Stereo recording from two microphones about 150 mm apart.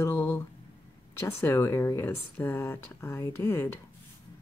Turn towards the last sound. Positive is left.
turn(degrees=15)  # may be behind; listen again after turning